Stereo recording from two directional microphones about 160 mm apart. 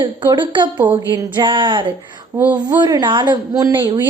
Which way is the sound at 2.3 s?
10° right (ahead or behind).